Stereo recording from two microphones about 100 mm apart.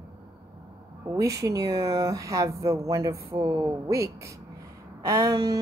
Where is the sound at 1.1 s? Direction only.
35° right (ahead or behind).